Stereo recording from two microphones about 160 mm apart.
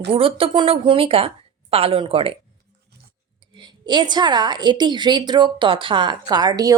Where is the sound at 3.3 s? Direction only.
30° right (ahead or behind).